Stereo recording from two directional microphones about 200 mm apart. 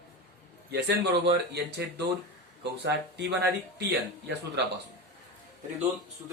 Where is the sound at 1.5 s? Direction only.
55° right (ahead or behind).